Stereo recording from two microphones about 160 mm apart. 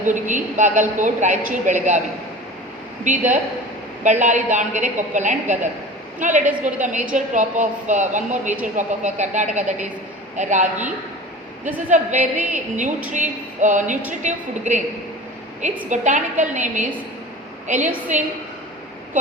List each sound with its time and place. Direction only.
0.0 s a woman's voice: 50° right (ahead or behind)
3.1 s a woman's voice: 50° right (ahead or behind)
6.4 s a woman's voice: 10° right (ahead or behind)
6.8 s a woman's voice: 50° right (ahead or behind)
15.9 s a woman's voice: 50° right (ahead or behind)
18.1 s a woman's voice: 50° right (ahead or behind)